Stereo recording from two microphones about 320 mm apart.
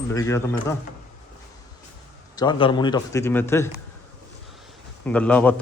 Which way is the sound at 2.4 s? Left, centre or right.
Centre.